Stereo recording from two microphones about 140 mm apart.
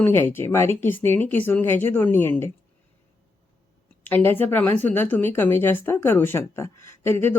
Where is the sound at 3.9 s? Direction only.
15° left (ahead or behind).